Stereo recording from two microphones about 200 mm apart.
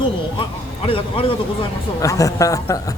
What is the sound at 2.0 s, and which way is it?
Speech, 15° left (ahead or behind).